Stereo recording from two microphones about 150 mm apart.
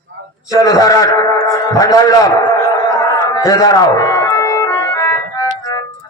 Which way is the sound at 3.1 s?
20° left (ahead or behind).